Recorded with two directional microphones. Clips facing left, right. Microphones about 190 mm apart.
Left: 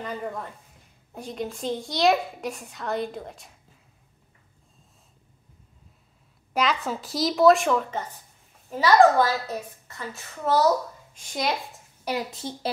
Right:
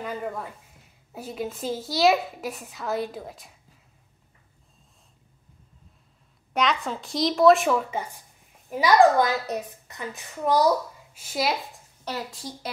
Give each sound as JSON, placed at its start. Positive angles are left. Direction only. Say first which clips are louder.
{"t": 0.0, "sound": "a child's voice", "louder": "right 1 dB", "side_deg": -5}
{"t": 6.5, "sound": "a child's voice", "louder": "even", "side_deg": 0}
{"t": 12.0, "sound": "a woman's voice", "louder": "left 4 dB", "side_deg": 15}